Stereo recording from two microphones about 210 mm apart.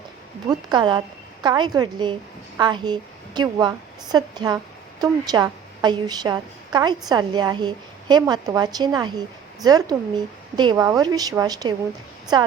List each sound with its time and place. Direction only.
0.4 s a woman's voice: 20° right (ahead or behind)